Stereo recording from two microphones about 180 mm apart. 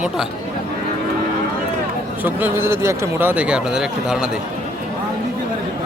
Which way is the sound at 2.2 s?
10° right (ahead or behind).